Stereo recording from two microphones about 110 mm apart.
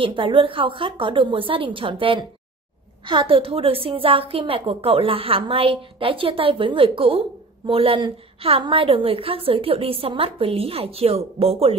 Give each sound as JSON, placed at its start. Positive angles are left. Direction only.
{"t": 0.0, "sound": "a woman's voice", "side_deg": -50}